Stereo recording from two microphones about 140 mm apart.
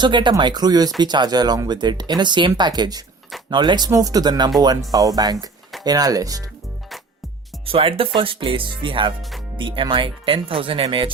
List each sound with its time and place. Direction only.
0.0 s speech: 35° right (ahead or behind)
7.6 s speech: 40° right (ahead or behind)